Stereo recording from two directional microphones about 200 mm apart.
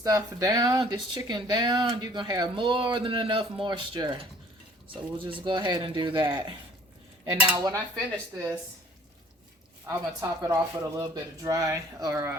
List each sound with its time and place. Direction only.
0.0 s speech: 15° right (ahead or behind)
7.5 s speech: 20° right (ahead or behind)
9.8 s speech: 15° right (ahead or behind)